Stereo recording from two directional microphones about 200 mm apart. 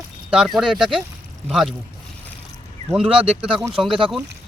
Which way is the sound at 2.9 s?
5° right (ahead or behind).